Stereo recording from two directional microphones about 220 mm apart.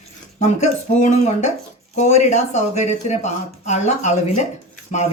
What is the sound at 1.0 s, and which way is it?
Speech, 35° left (ahead or behind).